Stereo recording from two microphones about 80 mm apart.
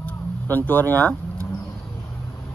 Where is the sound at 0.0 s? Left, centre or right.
Left.